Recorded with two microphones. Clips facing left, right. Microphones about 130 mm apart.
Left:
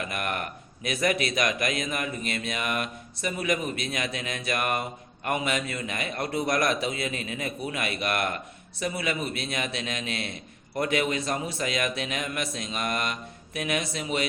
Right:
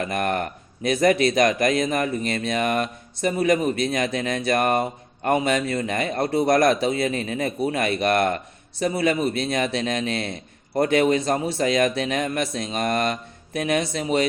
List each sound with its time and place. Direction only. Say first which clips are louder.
0.0 s speech: right 7 dB; 35° right (ahead or behind)